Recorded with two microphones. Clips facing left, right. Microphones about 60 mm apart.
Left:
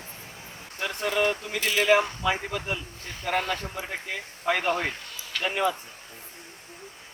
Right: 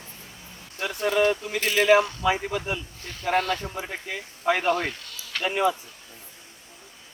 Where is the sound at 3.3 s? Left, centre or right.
Centre.